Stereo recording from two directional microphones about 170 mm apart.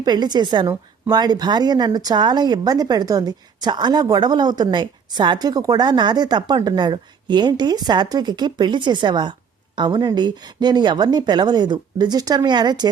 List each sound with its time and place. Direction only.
0.0 s a woman's voice: 25° right (ahead or behind)